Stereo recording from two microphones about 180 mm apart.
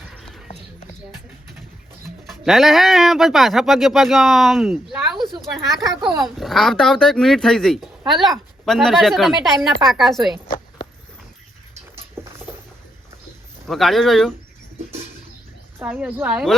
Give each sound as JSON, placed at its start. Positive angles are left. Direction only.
{"t": 0.0, "sound": "horse", "side_deg": 0}
{"t": 2.2, "sound": "speech", "side_deg": 0}
{"t": 12.2, "sound": "a sound", "side_deg": -15}
{"t": 13.7, "sound": "speech", "side_deg": 0}
{"t": 15.8, "sound": "speech", "side_deg": -5}